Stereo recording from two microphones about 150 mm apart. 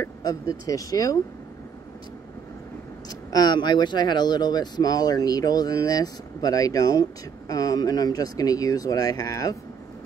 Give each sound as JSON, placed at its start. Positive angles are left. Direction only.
{"t": 0.0, "sound": "speech", "side_deg": 25}
{"t": 3.3, "sound": "speech", "side_deg": 25}